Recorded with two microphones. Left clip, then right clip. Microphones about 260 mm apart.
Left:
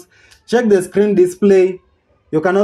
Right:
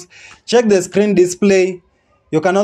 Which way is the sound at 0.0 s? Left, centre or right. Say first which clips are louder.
Right 8 dB; right.